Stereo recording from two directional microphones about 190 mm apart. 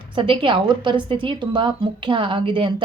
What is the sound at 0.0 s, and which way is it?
A woman's voice, 25° right (ahead or behind).